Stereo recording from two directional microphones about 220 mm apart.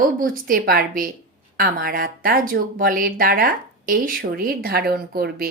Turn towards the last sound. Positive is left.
turn(degrees=-45)  # may be behind; listen again after turning